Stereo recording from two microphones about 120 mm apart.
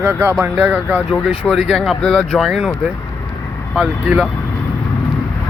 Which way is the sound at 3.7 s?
5° right (ahead or behind).